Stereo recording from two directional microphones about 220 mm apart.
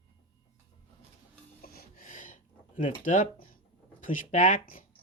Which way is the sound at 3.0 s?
35° left (ahead or behind).